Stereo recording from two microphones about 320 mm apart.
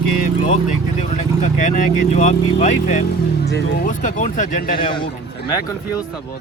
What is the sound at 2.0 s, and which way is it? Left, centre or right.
Speech, left.